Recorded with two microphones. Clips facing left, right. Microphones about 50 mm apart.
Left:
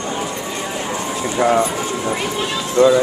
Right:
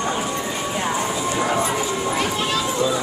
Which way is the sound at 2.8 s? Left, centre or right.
Left.